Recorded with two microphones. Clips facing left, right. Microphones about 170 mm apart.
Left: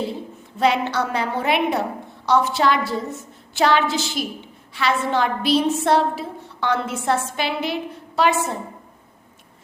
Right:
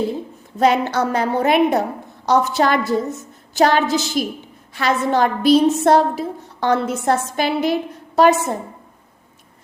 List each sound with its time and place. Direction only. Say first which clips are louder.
0.6 s a woman's voice: right 3 dB; 45° right (ahead or behind)